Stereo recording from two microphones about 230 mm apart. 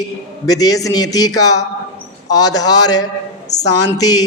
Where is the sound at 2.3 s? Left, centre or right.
Centre.